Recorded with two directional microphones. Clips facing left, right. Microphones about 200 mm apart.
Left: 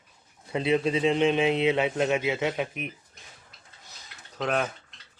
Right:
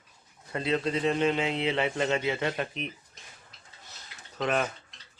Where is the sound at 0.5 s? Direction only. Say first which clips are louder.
Left 4 dB; 15° left (ahead or behind).